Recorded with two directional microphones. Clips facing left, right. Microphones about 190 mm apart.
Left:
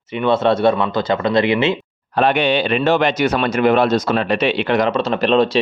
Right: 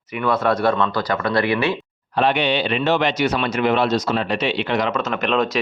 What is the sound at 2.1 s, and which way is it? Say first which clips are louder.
Speech: left 3 dB; 50° left (ahead or behind).